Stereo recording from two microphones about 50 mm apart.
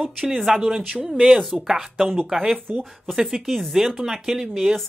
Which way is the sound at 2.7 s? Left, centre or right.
Centre.